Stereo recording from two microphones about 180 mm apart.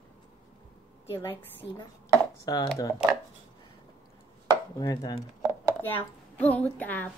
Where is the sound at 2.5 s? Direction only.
20° left (ahead or behind).